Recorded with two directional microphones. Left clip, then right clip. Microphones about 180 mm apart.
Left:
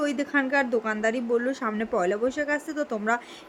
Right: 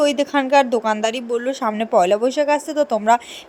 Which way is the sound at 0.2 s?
25° right (ahead or behind).